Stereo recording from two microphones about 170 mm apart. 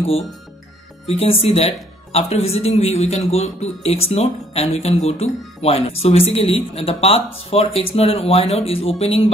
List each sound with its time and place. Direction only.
1.0 s a man's voice: 35° left (ahead or behind)